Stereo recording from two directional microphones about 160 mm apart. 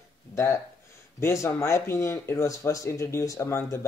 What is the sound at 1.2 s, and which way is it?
Speech, 20° left (ahead or behind).